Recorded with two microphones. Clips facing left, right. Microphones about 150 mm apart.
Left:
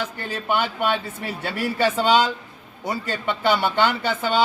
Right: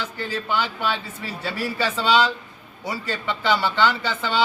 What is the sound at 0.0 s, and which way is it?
A man's voice, 50° left (ahead or behind).